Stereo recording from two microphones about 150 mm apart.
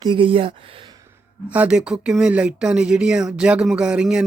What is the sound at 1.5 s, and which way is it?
Speech, 10° right (ahead or behind).